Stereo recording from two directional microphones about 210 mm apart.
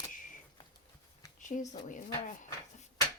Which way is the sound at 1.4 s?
35° left (ahead or behind).